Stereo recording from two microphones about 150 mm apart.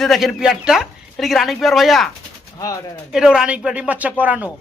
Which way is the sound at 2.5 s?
25° left (ahead or behind).